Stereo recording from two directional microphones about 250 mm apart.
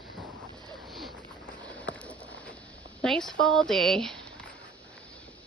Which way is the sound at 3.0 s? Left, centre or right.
Centre.